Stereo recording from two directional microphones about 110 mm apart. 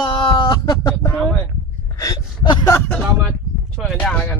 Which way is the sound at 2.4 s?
45° left (ahead or behind).